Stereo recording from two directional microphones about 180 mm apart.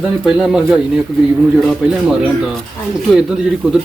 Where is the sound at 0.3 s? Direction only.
5° right (ahead or behind).